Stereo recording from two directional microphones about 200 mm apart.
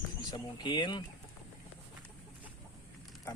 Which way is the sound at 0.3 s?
20° left (ahead or behind).